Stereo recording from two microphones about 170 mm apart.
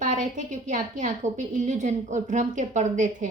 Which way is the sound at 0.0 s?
45° right (ahead or behind).